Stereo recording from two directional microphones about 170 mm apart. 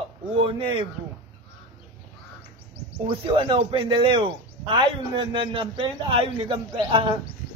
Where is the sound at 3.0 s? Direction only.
30° right (ahead or behind).